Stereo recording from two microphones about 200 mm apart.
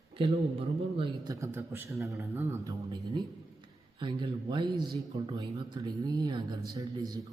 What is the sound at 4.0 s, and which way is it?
Speech, 25° right (ahead or behind).